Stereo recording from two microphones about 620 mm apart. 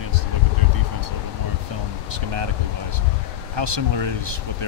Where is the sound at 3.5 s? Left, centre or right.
Right.